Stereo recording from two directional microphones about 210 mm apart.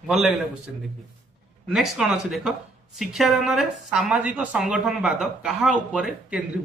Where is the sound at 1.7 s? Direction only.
Centre (ahead or behind).